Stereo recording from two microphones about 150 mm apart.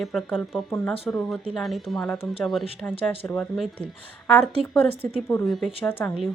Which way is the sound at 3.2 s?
15° left (ahead or behind).